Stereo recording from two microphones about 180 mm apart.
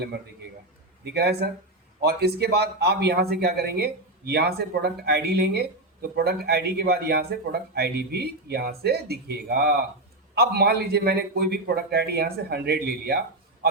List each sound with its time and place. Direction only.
1.0 s speech: 65° right (ahead or behind)